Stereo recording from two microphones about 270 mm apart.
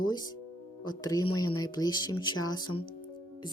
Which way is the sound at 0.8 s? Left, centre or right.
Centre.